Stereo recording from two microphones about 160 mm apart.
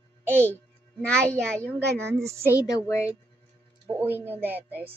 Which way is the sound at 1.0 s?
5° left (ahead or behind).